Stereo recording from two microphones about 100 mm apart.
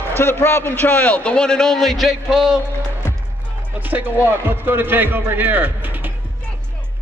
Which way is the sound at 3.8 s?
20° right (ahead or behind).